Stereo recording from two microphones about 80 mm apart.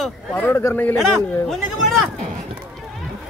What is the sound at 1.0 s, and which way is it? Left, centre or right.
Speech, centre.